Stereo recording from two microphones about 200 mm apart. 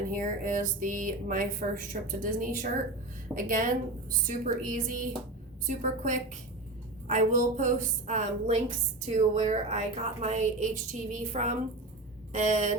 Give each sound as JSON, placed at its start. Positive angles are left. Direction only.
{"t": 0.1, "sound": "a woman's voice", "side_deg": -40}